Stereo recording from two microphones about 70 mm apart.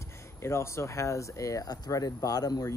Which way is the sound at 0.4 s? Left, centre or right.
Left.